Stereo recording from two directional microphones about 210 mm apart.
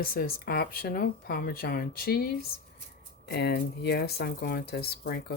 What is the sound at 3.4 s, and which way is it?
Speech, 50° left (ahead or behind).